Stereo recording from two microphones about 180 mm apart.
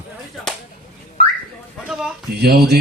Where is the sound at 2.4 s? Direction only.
60° right (ahead or behind).